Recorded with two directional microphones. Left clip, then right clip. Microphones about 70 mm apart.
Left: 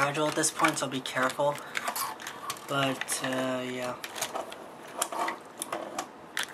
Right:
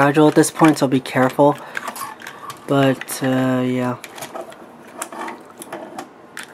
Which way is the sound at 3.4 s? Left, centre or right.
Right.